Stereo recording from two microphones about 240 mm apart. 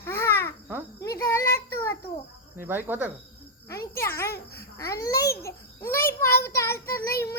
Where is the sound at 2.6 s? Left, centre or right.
Centre.